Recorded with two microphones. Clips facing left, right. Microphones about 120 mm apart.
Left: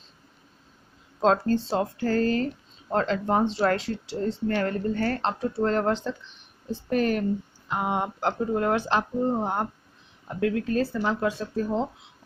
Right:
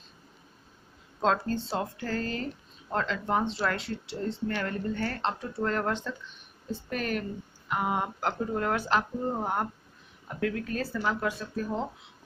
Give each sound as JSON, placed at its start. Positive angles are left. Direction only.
{"t": 1.2, "sound": "speech", "side_deg": 35}